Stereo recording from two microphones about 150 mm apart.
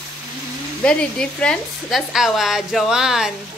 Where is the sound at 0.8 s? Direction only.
5° left (ahead or behind).